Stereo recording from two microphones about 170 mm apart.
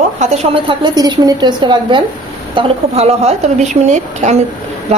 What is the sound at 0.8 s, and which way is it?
A woman's voice, 25° right (ahead or behind).